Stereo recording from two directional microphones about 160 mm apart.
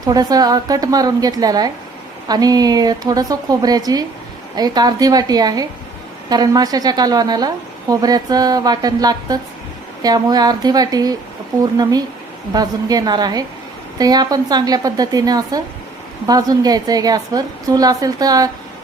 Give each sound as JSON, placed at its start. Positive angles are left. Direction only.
{"t": 0.0, "sound": "a woman's voice", "side_deg": -25}